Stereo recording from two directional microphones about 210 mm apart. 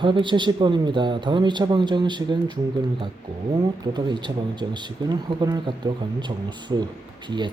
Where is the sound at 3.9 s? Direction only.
20° right (ahead or behind).